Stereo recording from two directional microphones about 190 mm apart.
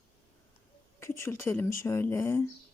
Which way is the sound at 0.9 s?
15° left (ahead or behind).